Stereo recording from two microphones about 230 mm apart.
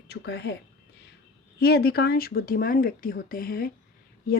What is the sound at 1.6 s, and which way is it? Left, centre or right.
Speech, left.